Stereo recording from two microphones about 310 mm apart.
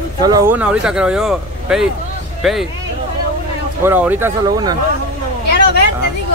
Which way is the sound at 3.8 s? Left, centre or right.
Centre.